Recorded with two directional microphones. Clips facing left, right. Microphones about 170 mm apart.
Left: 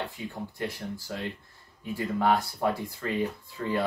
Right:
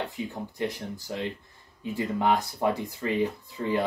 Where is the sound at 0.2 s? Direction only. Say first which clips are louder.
Right 3 dB; 20° right (ahead or behind).